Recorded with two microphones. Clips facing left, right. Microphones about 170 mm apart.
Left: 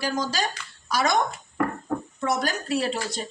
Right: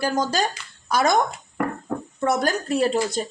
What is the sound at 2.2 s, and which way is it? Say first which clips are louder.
Speech: right 6 dB; 45° right (ahead or behind).